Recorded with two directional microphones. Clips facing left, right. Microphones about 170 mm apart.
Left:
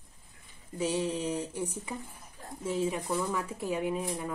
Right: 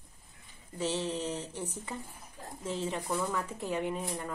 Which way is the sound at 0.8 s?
10° left (ahead or behind).